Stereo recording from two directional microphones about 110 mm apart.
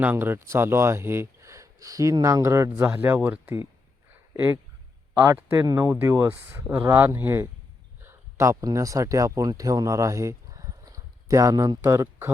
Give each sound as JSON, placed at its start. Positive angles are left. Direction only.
{"t": 0.0, "sound": "speech", "side_deg": -20}
{"t": 5.1, "sound": "speech", "side_deg": -30}